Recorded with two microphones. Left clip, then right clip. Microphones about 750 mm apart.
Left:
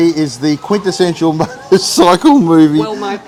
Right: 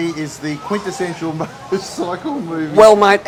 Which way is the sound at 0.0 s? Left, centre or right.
Left.